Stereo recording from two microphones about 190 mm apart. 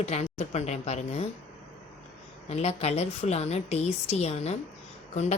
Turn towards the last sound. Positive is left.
turn(degrees=35)  # may be behind; listen again after turning